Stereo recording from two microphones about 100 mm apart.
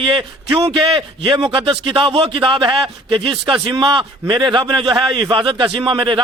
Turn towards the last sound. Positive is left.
turn(degrees=-55)  # may be behind; listen again after turning